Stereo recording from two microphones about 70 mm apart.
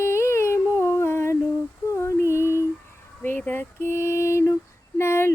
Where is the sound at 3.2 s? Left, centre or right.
Left.